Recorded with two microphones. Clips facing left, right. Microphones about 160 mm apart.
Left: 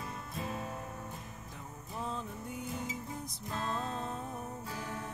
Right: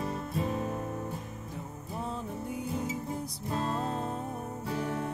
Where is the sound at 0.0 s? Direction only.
35° right (ahead or behind).